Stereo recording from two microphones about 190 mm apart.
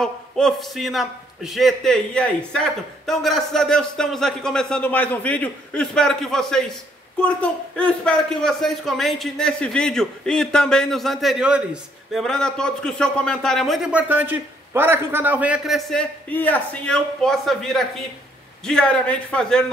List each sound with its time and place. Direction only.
0.0 s a man's voice: centre (ahead or behind)